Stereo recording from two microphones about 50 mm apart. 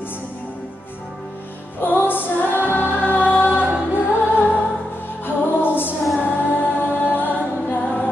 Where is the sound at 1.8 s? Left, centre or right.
Left.